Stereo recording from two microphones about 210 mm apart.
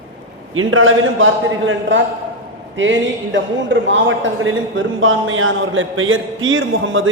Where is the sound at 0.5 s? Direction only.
75° right (ahead or behind).